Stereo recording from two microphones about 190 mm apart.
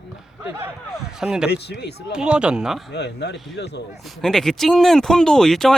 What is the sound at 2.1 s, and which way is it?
Speech, 5° right (ahead or behind).